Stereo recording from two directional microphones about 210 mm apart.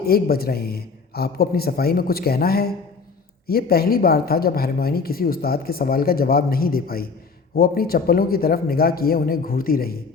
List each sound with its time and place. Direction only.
0.0 s speech: 45° left (ahead or behind)